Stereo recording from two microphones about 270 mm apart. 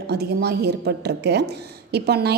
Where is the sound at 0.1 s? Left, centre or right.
Right.